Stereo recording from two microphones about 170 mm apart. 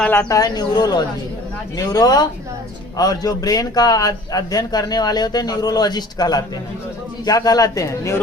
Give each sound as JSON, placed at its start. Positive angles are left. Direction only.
{"t": 0.0, "sound": "speech", "side_deg": 5}
{"t": 0.3, "sound": "a man's voice", "side_deg": 20}